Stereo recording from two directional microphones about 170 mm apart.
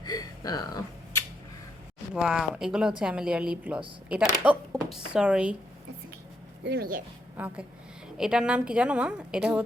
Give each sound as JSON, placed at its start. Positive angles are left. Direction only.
{"t": 0.0, "sound": "a sound", "side_deg": 25}
{"t": 2.1, "sound": "speech", "side_deg": -5}
{"t": 6.7, "sound": "speech", "side_deg": -70}
{"t": 7.3, "sound": "a woman's voice", "side_deg": -10}